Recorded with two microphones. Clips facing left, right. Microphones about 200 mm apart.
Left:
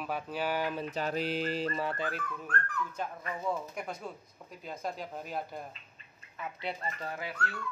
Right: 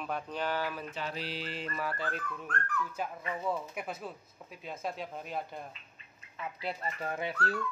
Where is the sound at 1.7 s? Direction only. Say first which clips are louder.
Left 3 dB; 25° left (ahead or behind).